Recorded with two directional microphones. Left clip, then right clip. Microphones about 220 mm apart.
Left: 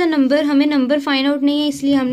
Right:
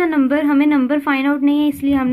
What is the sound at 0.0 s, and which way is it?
A woman's voice, 35° left (ahead or behind).